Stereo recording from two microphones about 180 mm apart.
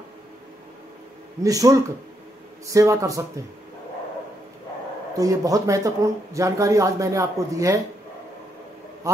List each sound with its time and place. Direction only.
1.4 s speech: 20° right (ahead or behind)
5.1 s speech: 20° right (ahead or behind)
9.0 s a sound: 15° right (ahead or behind)